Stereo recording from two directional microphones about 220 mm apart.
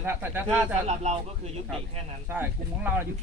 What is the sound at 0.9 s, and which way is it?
Speech, 30° right (ahead or behind).